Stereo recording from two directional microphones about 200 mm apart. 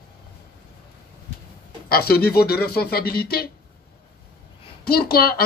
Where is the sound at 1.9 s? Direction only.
50° left (ahead or behind).